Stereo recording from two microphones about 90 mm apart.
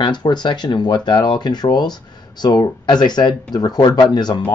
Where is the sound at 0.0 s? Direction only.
55° left (ahead or behind).